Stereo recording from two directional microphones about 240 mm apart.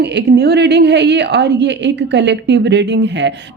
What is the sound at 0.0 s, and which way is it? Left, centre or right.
A woman's voice, right.